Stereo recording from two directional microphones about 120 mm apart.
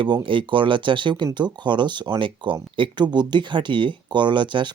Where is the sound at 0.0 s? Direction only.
45° right (ahead or behind).